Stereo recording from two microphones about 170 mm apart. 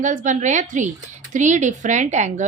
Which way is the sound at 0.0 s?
45° right (ahead or behind).